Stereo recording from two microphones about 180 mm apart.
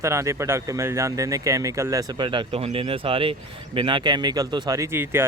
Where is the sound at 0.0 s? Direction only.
15° right (ahead or behind).